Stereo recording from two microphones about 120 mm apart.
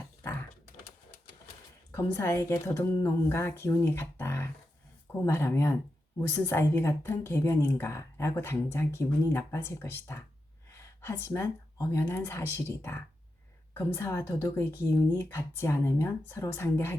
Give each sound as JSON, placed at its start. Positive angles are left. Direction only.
{"t": 1.9, "sound": "a woman's voice", "side_deg": 25}